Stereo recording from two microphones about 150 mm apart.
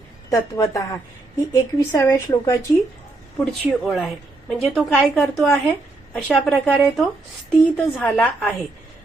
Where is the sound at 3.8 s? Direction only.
Centre (ahead or behind).